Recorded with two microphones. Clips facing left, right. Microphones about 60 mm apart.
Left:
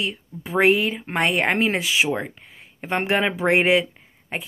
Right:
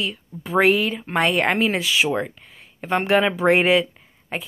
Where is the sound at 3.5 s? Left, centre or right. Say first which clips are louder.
Left 1 dB; left.